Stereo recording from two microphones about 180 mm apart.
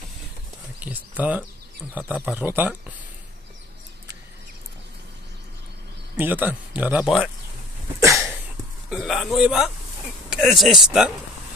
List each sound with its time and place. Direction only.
0.8 s speech: 10° right (ahead or behind)
6.1 s speech: 10° right (ahead or behind)
8.0 s cough: 15° right (ahead or behind)
8.9 s a man's voice: centre (ahead or behind)